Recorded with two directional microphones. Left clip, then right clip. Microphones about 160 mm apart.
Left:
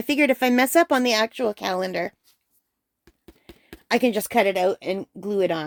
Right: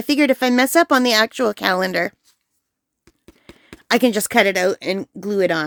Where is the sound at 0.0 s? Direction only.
25° right (ahead or behind); by 2.1 s 45° right (ahead or behind).